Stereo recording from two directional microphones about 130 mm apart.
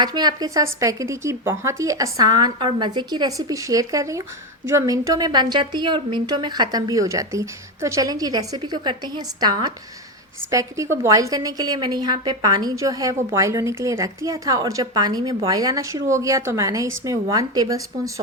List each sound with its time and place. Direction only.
0.0 s a woman's voice: 30° right (ahead or behind)